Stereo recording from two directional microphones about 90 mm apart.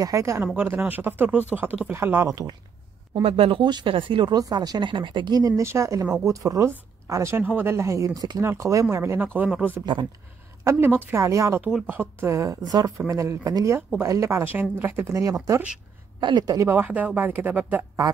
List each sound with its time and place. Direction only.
0.0 s speech: 35° right (ahead or behind)
0.6 s speech: 20° right (ahead or behind)
2.2 s a woman's voice: 45° right (ahead or behind)
3.2 s speech: 90° right; by 4.4 s 70° right (ahead or behind)
4.4 s speech: 45° right (ahead or behind)
5.4 s speech: 35° right (ahead or behind)
7.4 s speech: 20° right (ahead or behind)
7.7 s speech: 35° right (ahead or behind)
10.6 s a woman's voice: 25° right (ahead or behind)
11.6 s speech: 15° right (ahead or behind)
15.0 s speech: 35° right (ahead or behind)
16.2 s a woman's voice: 55° right (ahead or behind)
16.5 s speech: 25° right (ahead or behind)